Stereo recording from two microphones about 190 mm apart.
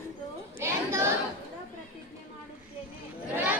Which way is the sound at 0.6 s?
15° right (ahead or behind).